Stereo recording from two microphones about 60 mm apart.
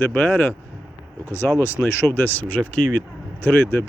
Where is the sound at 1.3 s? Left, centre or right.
Left.